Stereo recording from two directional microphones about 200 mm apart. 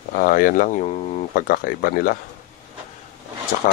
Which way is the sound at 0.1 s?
45° left (ahead or behind).